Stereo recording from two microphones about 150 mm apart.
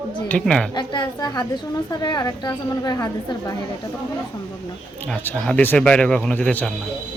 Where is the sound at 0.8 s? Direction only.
30° left (ahead or behind).